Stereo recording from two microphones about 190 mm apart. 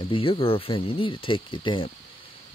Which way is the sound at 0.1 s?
30° left (ahead or behind).